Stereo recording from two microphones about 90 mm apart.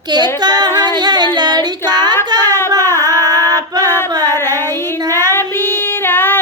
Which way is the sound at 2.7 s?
30° left (ahead or behind).